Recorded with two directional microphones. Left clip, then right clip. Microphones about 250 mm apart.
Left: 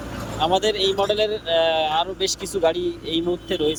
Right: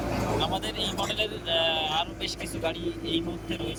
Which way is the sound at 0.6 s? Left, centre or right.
Left.